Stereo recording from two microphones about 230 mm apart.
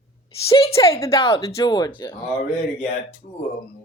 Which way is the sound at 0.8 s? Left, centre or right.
Centre.